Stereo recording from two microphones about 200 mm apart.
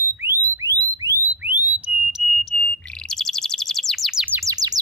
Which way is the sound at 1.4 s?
10° right (ahead or behind).